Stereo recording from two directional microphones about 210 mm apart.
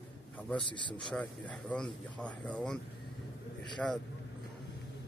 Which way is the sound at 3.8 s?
5° left (ahead or behind).